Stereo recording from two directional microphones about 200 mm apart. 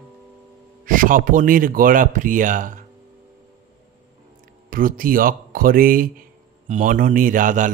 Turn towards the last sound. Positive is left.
turn(degrees=-40)  # may be behind; listen again after turning